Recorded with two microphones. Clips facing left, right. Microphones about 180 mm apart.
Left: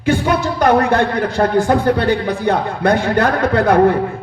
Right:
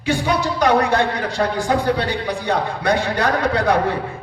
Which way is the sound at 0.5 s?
55° left (ahead or behind).